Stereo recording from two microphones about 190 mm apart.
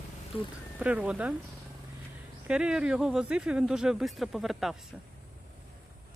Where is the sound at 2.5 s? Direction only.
5° right (ahead or behind).